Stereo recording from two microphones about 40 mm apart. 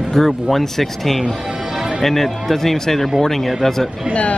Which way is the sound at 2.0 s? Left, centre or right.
Centre.